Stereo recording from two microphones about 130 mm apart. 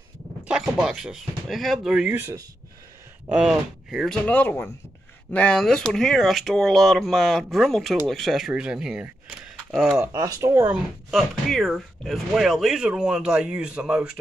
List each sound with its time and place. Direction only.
0.5 s speech: 5° right (ahead or behind)
3.3 s speech: 5° right (ahead or behind)
4.3 s speech: 15° left (ahead or behind)
10.1 s speech: 25° right (ahead or behind)
11.1 s speech: centre (ahead or behind)